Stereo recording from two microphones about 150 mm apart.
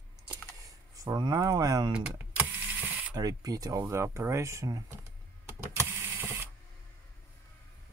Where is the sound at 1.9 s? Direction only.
10° right (ahead or behind).